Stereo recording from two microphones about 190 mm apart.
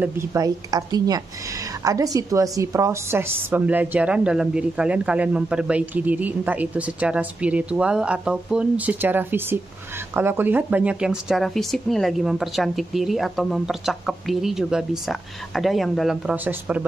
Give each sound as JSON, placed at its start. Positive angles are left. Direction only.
{"t": 0.0, "sound": "a woman's voice", "side_deg": -15}